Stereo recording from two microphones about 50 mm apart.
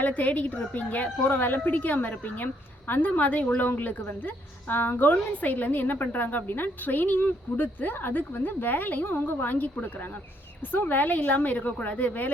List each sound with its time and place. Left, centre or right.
0.0 s a woman's voice: left